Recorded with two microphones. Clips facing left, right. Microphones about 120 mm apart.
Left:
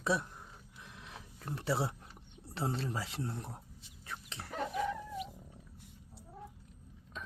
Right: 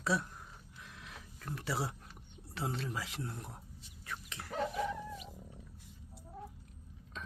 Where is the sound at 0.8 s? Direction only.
20° left (ahead or behind).